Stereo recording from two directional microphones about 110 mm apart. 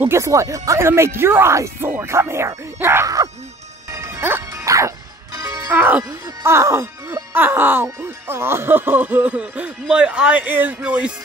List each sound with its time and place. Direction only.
0.0 s speech: 25° right (ahead or behind)
3.9 s music: 25° right (ahead or behind)
5.7 s music: 20° right (ahead or behind)
6.2 s speech: 25° right (ahead or behind)